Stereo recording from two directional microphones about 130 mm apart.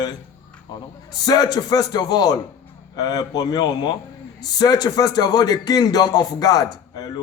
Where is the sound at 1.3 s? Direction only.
30° left (ahead or behind).